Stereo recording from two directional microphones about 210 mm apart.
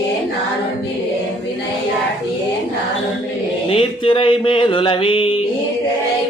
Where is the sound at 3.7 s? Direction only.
25° left (ahead or behind).